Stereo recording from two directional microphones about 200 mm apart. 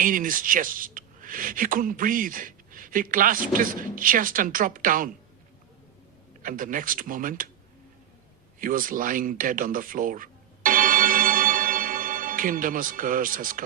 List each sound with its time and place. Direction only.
0.0 s speech: 45° right (ahead or behind)
6.4 s speech: 45° right (ahead or behind)
8.5 s a sound: 45° right (ahead or behind)